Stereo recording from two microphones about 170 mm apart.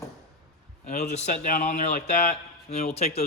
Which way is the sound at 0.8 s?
45° left (ahead or behind).